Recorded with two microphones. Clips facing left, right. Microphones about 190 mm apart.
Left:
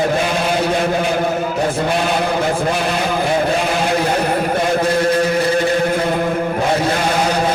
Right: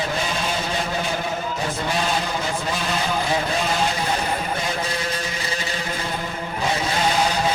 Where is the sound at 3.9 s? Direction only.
60° left (ahead or behind).